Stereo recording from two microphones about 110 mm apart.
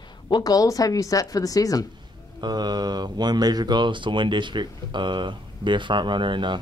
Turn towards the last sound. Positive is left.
turn(degrees=-45)  # may be behind; listen again after turning